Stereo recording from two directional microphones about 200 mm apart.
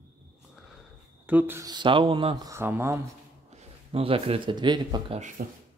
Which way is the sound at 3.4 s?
30° right (ahead or behind).